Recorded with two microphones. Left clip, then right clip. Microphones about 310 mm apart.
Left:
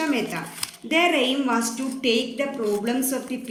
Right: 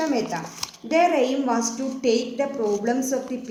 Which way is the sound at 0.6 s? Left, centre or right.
Centre.